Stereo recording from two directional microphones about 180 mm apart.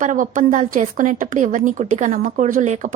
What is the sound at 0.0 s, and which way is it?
Speech, 45° right (ahead or behind).